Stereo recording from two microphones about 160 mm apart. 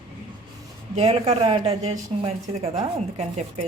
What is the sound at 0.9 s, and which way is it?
Speech, 40° right (ahead or behind).